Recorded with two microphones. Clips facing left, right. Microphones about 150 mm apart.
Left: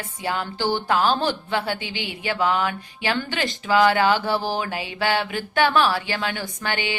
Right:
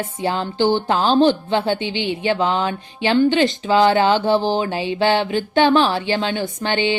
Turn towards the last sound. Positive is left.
turn(degrees=-25)  # may be behind; listen again after turning